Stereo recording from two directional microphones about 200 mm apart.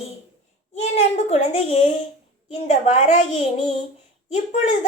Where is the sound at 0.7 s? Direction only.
35° left (ahead or behind).